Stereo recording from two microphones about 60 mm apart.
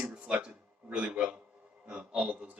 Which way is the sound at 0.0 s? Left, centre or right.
Centre.